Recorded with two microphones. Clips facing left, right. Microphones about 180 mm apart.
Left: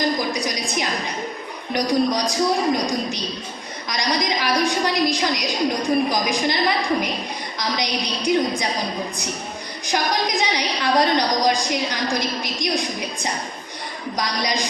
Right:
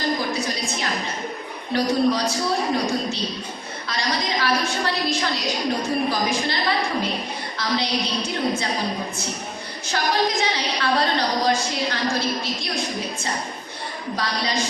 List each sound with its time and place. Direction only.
0.3 s a sound: 15° left (ahead or behind)
1.7 s a woman's voice: 15° left (ahead or behind)
7.6 s a woman's voice: 15° left (ahead or behind)
9.8 s a woman's voice: 15° left (ahead or behind)